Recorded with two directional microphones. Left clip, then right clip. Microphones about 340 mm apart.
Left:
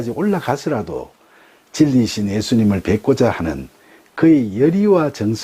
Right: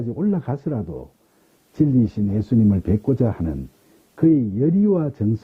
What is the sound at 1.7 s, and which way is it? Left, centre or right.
Speech, centre.